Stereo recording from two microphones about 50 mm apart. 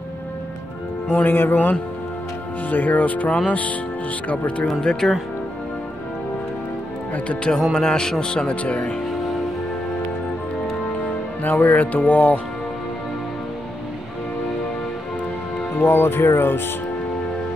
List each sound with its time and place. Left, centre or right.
1.1 s speech: left
5.0 s speech: centre
7.2 s speech: left
11.4 s speech: left
15.8 s speech: left